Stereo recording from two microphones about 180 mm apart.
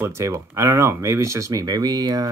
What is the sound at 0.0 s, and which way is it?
Speech, 15° right (ahead or behind).